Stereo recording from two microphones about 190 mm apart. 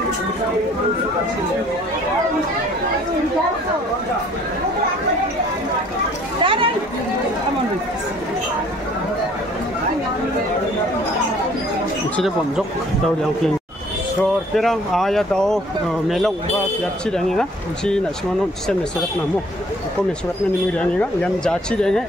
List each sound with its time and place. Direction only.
6.4 s chatter: 25° right (ahead or behind)
14.5 s speech: centre (ahead or behind)
20.8 s speech: 5° left (ahead or behind)